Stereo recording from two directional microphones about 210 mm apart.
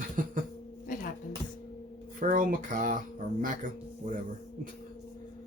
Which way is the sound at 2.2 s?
40° right (ahead or behind).